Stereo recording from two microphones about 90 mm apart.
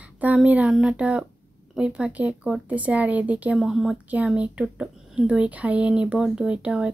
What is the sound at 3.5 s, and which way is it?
Speech, centre (ahead or behind).